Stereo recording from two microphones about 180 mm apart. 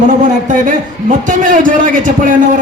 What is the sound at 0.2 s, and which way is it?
A man's voice, 45° right (ahead or behind).